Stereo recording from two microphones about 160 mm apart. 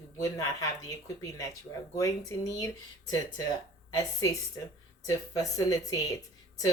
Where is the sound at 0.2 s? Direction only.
20° left (ahead or behind).